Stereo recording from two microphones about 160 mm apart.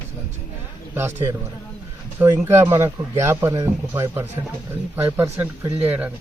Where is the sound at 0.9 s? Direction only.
15° right (ahead or behind).